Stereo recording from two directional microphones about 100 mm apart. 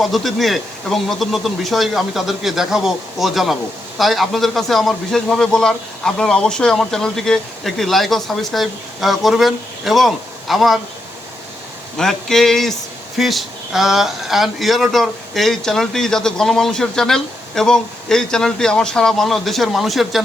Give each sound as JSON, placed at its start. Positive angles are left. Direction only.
{"t": 0.0, "sound": "speech", "side_deg": 0}
{"t": 11.9, "sound": "speech", "side_deg": 5}